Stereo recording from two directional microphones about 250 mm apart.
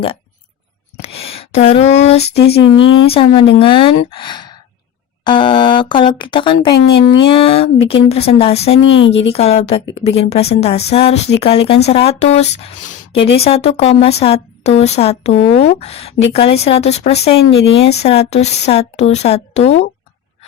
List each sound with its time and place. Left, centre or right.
0.9 s a sound: left
2.6 s speech: left
3.1 s a woman's voice: left
7.0 s speech: left
7.3 s a woman's voice: left
8.8 s speech: left
9.0 s a woman's voice: left